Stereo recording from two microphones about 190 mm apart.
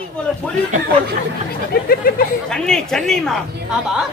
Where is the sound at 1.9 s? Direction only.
50° left (ahead or behind).